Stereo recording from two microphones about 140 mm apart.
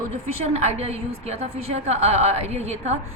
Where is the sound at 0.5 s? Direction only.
50° right (ahead or behind).